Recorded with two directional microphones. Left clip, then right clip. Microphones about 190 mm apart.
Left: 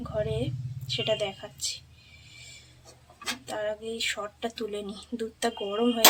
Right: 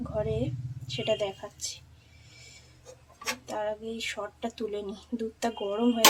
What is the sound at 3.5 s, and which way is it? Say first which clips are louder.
Speech: left 2 dB; centre (ahead or behind).